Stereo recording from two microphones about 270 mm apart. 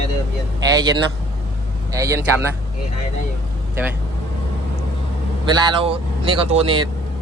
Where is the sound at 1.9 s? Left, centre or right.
Centre.